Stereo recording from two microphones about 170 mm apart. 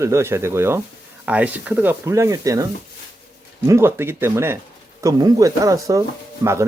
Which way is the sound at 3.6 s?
15° right (ahead or behind).